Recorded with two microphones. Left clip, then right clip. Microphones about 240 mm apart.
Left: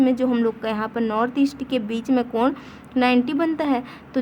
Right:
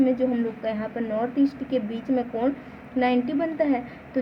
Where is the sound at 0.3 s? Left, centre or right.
Left.